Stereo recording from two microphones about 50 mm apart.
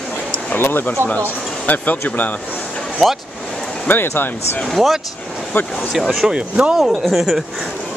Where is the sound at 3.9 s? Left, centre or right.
Left.